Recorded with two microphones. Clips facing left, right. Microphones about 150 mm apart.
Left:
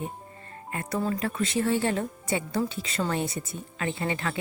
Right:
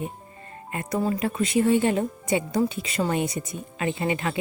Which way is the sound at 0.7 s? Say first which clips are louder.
Right 3 dB; 15° right (ahead or behind).